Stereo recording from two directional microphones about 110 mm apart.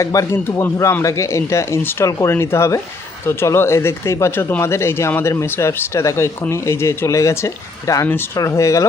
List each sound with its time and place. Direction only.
0.0 s speech: 30° left (ahead or behind)